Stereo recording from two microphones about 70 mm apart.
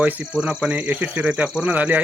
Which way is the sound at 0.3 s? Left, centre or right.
Centre.